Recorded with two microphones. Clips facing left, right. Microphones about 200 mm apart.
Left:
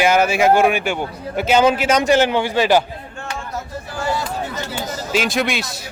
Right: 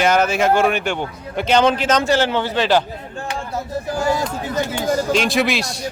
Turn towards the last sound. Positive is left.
turn(degrees=0)  # may be behind; listen again after turning